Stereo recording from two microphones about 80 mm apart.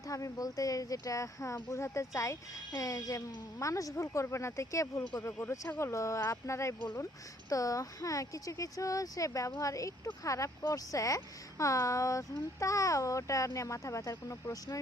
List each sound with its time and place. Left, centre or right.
0.1 s speech: left